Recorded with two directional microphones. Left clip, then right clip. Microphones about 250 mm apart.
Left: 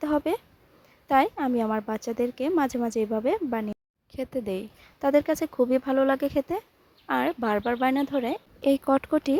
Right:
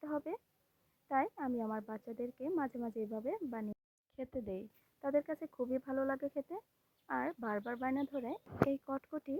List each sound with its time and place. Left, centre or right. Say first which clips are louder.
0.0 s speech: left 15 dB; left